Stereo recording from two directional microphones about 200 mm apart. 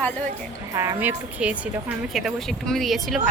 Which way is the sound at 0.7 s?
15° right (ahead or behind).